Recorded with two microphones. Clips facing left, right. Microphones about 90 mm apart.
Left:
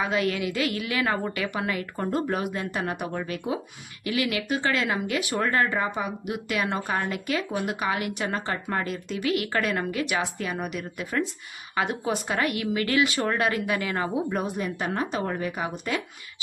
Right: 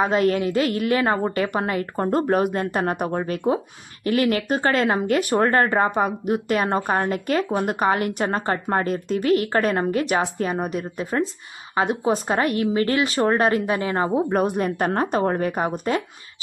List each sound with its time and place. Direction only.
0.0 s a woman's voice: 40° right (ahead or behind)
14.3 s a woman's voice: 55° right (ahead or behind)